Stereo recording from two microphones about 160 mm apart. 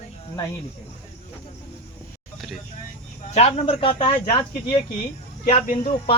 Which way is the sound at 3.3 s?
40° left (ahead or behind).